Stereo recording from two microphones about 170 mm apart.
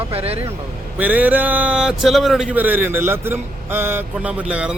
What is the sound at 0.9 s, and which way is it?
A man's voice, 10° right (ahead or behind).